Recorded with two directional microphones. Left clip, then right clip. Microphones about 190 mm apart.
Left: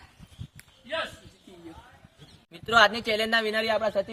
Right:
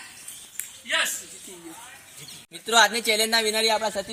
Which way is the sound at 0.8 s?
35° left (ahead or behind).